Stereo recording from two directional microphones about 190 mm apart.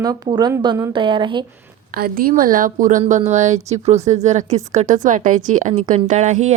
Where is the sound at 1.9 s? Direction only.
50° right (ahead or behind).